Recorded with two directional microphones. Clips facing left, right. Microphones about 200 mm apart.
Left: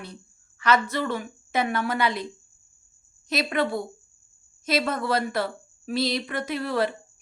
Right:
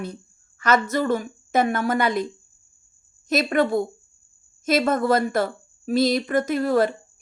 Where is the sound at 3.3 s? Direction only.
45° right (ahead or behind).